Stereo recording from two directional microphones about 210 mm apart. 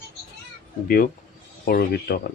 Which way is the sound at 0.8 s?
45° left (ahead or behind).